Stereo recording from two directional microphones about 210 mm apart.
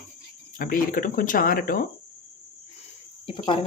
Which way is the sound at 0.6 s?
40° left (ahead or behind).